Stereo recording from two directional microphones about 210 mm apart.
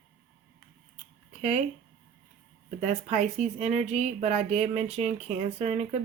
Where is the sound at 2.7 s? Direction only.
35° right (ahead or behind).